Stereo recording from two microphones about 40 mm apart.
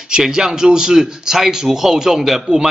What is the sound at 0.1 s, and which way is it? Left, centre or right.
A man's voice, centre.